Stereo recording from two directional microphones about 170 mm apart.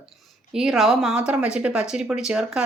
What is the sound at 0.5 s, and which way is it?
A woman's voice, centre (ahead or behind).